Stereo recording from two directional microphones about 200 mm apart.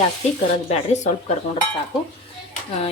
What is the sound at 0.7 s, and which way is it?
Speech, 35° left (ahead or behind).